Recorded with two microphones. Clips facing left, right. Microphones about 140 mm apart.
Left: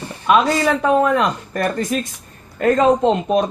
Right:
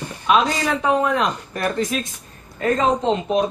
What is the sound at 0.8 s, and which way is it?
Speech, 50° left (ahead or behind).